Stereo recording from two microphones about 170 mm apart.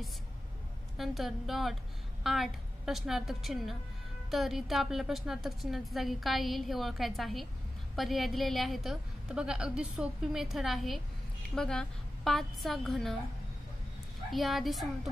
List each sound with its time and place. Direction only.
0.9 s a woman's voice: centre (ahead or behind)
14.3 s a woman's voice: centre (ahead or behind)